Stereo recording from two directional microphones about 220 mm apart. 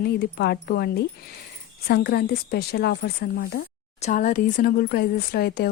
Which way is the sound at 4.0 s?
35° left (ahead or behind).